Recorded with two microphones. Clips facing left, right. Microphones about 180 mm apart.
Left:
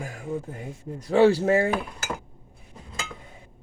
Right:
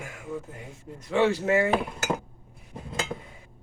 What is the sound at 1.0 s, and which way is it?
Speech, 35° left (ahead or behind).